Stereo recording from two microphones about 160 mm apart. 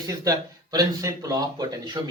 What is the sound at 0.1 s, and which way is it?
Speech, 20° right (ahead or behind).